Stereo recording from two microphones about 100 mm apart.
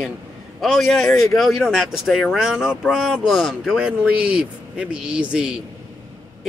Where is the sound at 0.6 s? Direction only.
Centre (ahead or behind).